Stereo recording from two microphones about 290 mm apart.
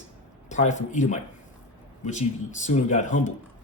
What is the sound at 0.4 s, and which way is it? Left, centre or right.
A man's voice, left.